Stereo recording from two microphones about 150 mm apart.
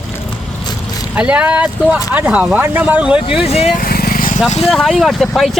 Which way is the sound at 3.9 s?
80° left.